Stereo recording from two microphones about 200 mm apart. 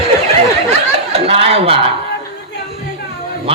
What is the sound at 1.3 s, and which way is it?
Speech, 30° right (ahead or behind).